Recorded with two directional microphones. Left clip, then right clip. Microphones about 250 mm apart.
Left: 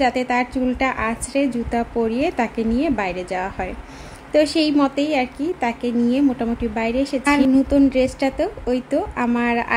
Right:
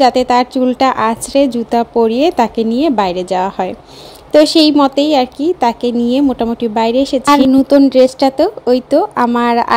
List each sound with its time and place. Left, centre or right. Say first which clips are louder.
0.0 s speech: right 9 dB; right